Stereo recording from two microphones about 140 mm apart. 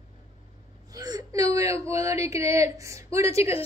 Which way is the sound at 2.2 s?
20° right (ahead or behind).